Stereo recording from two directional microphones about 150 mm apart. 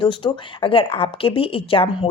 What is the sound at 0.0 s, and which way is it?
Speech, 35° left (ahead or behind).